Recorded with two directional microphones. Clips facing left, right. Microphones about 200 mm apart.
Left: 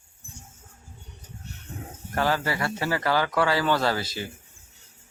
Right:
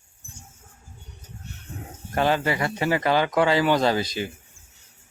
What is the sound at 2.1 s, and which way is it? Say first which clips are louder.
Speech: right 3 dB; 20° right (ahead or behind).